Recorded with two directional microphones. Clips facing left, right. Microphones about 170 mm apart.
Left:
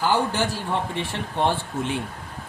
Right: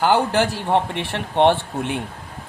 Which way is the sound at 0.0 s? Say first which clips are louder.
Right 5 dB; 65° right (ahead or behind).